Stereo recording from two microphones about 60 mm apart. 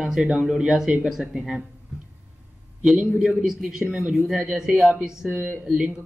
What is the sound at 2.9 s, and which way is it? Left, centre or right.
Speech, centre.